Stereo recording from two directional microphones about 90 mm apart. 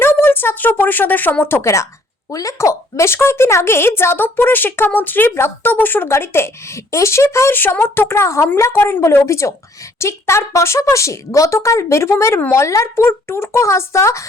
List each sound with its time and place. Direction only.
0.0 s a woman's voice: 25° left (ahead or behind)